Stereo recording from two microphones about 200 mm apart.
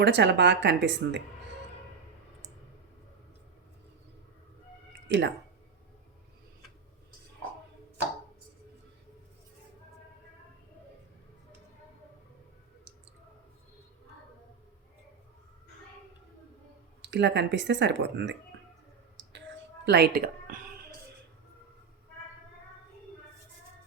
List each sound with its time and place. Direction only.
0.0 s speech: 60° right (ahead or behind)
5.0 s speech: 60° right (ahead or behind)
17.0 s speech: 60° right (ahead or behind)
19.8 s speech: 55° right (ahead or behind)